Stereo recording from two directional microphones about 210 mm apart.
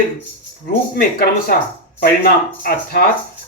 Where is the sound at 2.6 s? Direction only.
45° left (ahead or behind).